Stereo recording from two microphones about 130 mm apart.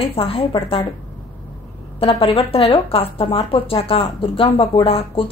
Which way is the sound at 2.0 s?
45° left (ahead or behind).